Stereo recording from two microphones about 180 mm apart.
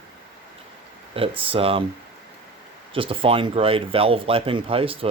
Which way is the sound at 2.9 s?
30° right (ahead or behind).